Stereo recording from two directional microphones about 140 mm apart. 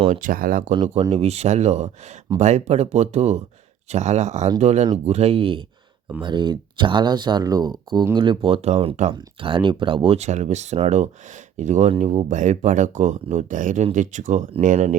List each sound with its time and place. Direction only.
0.1 s speech: 75° right (ahead or behind)
0.7 s speech: 35° right (ahead or behind)
1.1 s speech: 50° right (ahead or behind)